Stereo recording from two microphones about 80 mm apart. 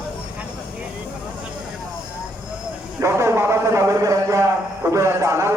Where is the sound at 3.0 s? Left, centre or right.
Right.